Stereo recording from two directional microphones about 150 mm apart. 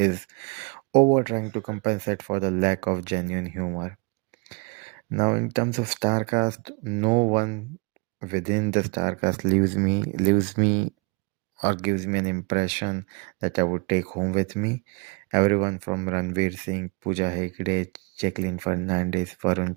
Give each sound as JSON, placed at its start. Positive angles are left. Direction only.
{"t": 0.0, "sound": "speech", "side_deg": -40}
{"t": 5.1, "sound": "speech", "side_deg": -30}
{"t": 10.5, "sound": "speech", "side_deg": -50}